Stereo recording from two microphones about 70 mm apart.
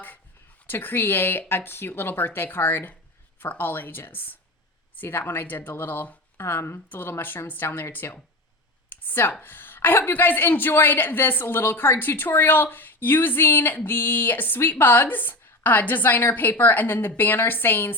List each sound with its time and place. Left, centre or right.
0.7 s speech: left
8.9 s a sound: left
9.3 s speech: left